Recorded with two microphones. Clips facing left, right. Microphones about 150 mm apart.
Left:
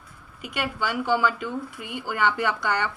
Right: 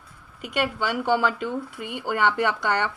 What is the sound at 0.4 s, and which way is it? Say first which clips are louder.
Speech: right 3 dB; 60° right (ahead or behind).